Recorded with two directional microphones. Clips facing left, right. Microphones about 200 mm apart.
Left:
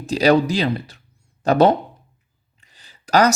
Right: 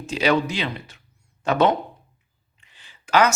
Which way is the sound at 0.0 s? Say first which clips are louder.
Left 5 dB; 35° left (ahead or behind).